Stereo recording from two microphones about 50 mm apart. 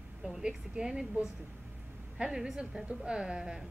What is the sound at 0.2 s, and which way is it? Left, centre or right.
A woman's voice, centre.